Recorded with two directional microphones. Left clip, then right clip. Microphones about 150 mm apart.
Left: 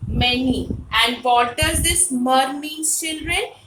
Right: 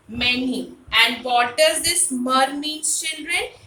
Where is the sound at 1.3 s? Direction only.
60° left (ahead or behind).